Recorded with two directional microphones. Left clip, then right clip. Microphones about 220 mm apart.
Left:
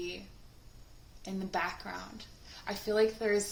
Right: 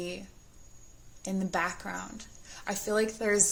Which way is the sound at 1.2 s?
45° right (ahead or behind).